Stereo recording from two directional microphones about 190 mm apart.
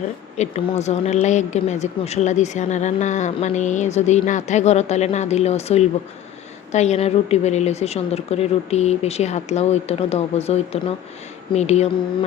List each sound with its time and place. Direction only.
0.3 s speech: 35° left (ahead or behind)